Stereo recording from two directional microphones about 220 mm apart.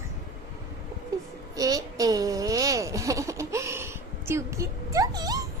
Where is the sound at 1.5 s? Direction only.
15° right (ahead or behind).